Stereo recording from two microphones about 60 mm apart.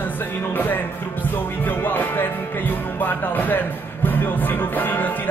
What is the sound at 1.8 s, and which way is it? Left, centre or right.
Speech, left.